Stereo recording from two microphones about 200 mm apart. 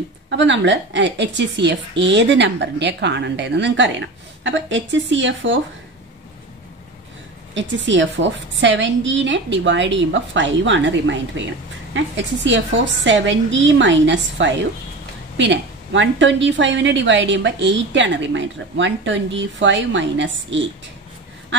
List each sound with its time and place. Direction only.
0.3 s a woman's voice: 65° right (ahead or behind)
7.5 s a woman's voice: 65° right (ahead or behind)